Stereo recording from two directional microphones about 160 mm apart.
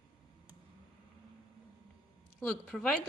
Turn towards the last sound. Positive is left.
turn(degrees=5)  # may be behind; listen again after turning